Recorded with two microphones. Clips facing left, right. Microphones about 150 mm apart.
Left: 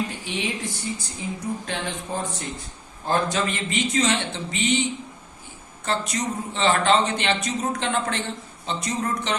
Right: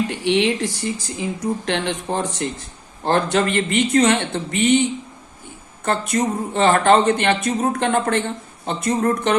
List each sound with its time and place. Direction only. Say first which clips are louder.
0.1 s speech: right 11 dB; 80° right; by 9.3 s 50° right (ahead or behind)